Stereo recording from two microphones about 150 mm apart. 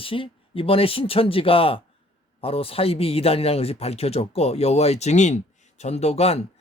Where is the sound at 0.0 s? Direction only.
35° left (ahead or behind).